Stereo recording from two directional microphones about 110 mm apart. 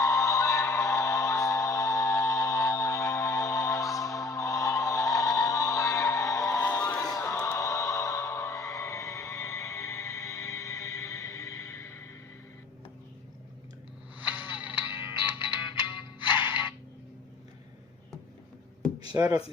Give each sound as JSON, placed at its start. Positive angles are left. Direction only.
{"t": 0.0, "sound": "music", "side_deg": 30}
{"t": 14.2, "sound": "a sound", "side_deg": -15}
{"t": 14.6, "sound": "music", "side_deg": -15}
{"t": 15.0, "sound": "music", "side_deg": 50}